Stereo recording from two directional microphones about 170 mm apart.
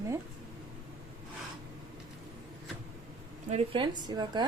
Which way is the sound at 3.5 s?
35° right (ahead or behind).